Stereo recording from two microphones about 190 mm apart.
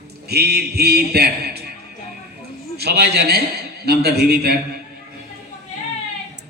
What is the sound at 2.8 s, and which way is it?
A man's voice, 55° right (ahead or behind).